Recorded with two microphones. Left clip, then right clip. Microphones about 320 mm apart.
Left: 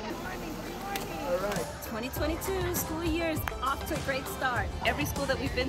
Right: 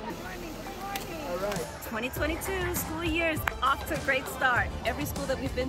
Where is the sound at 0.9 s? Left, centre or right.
Centre.